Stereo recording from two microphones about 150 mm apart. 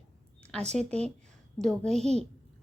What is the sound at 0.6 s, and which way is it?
Speech, 50° right (ahead or behind).